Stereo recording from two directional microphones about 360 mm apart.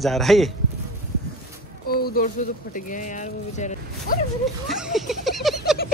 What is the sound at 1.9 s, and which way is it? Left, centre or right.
Speech, left.